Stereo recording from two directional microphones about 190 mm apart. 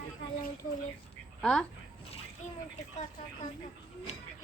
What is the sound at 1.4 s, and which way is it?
Speech, 5° left (ahead or behind).